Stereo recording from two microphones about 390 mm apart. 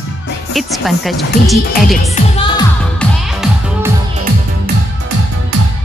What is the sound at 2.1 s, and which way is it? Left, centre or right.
Music, centre.